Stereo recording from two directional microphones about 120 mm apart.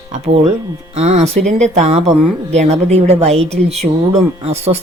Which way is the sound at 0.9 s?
60° right (ahead or behind).